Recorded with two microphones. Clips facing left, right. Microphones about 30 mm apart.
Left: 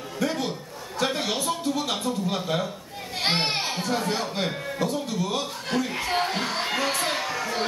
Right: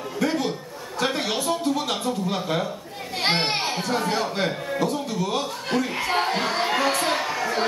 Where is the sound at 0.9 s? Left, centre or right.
Centre.